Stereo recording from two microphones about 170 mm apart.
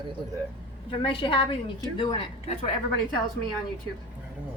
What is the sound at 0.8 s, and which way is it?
A woman's voice, 30° left (ahead or behind).